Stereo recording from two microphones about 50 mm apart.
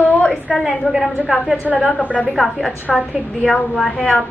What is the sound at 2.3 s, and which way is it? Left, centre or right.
Speech, centre.